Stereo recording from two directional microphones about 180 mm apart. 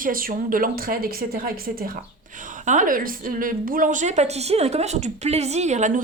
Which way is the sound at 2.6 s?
45° right (ahead or behind).